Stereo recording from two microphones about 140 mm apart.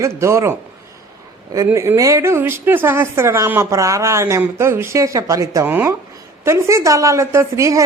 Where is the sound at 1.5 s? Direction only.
20° right (ahead or behind).